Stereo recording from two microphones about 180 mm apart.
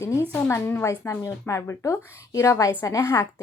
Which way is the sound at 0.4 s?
15° left (ahead or behind).